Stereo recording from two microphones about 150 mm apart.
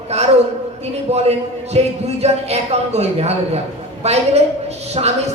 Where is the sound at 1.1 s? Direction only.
45° right (ahead or behind).